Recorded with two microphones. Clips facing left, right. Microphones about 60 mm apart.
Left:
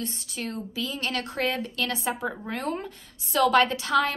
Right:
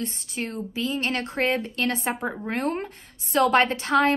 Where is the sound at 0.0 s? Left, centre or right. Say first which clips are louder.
Right 3 dB; right.